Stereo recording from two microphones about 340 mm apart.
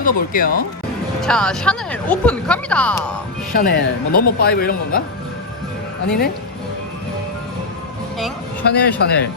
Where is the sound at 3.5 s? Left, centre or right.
Left.